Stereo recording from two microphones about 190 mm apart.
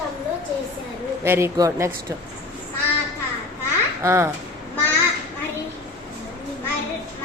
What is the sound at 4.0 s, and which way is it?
Speech, 15° right (ahead or behind).